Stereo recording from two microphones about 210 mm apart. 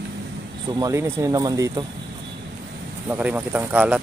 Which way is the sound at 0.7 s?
15° right (ahead or behind).